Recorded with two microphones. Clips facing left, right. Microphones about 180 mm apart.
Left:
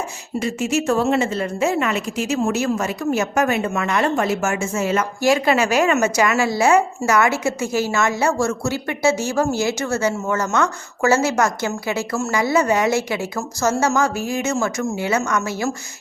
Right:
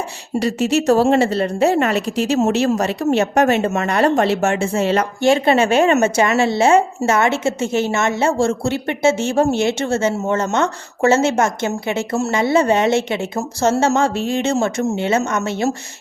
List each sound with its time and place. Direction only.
0.3 s a woman's voice: 35° right (ahead or behind)